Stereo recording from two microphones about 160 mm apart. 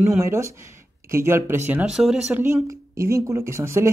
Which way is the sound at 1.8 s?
5° right (ahead or behind).